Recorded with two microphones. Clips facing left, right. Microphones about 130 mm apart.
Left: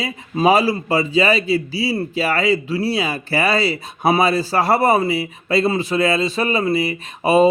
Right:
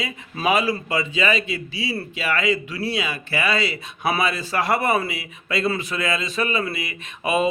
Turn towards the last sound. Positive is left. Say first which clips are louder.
# left 8 dB
turn(degrees=30)  # may be behind; listen again after turning